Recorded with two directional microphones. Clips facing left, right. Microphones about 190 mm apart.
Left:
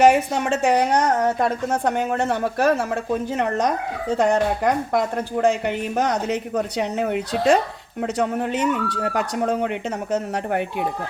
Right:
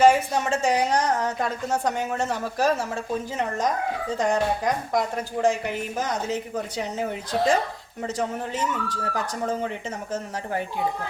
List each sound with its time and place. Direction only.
0.0 s a woman's voice: 65° left (ahead or behind)